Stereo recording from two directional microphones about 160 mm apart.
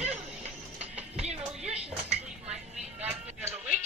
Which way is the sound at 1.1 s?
45° right (ahead or behind).